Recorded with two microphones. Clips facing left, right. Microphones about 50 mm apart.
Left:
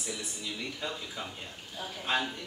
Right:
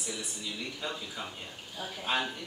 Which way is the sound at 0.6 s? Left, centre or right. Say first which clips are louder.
Even; centre.